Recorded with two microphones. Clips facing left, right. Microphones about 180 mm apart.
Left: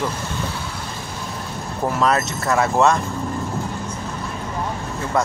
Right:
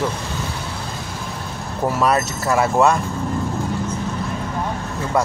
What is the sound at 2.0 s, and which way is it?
Speech, 10° right (ahead or behind).